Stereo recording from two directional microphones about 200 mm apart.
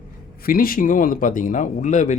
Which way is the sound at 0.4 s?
45° left (ahead or behind).